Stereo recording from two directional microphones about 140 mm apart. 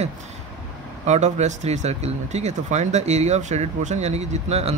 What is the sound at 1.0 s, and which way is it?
Speech, 55° right (ahead or behind).